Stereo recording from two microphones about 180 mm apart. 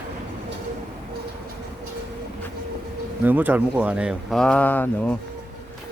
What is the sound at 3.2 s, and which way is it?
Speech, 10° right (ahead or behind).